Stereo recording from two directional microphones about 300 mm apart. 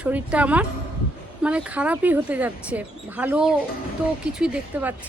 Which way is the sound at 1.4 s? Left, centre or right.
Centre.